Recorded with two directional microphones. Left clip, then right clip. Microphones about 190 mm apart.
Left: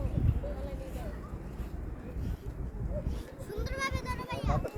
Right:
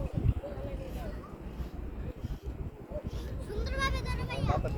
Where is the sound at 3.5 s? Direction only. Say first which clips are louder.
Right 1 dB; 50° left (ahead or behind).